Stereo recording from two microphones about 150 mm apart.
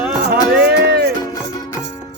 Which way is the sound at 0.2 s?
90° right.